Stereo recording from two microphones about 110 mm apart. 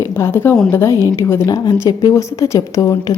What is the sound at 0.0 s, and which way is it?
A woman's voice, 20° left (ahead or behind).